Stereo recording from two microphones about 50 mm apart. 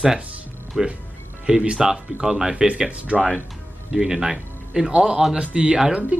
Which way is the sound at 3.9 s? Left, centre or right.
Centre.